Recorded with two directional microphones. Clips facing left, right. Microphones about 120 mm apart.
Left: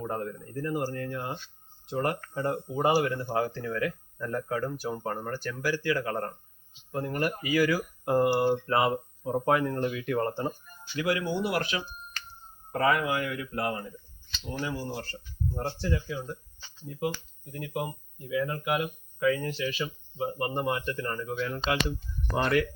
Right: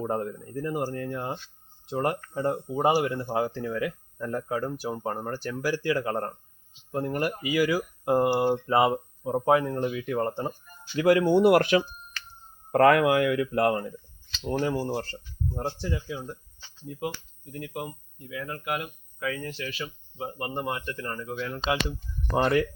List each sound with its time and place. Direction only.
0.0 s speech: 25° right (ahead or behind)
8.6 s speech: 15° right (ahead or behind)
11.0 s speech: 30° right (ahead or behind)
11.3 s speech: 55° right (ahead or behind)
12.7 s speech: 80° right
14.6 s speech: 40° right (ahead or behind)
15.5 s speech: 15° right (ahead or behind)
17.0 s speech: centre (ahead or behind)
22.4 s speech: 30° right (ahead or behind)